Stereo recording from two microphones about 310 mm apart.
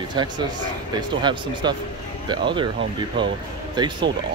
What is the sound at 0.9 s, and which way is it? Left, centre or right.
Speech, centre.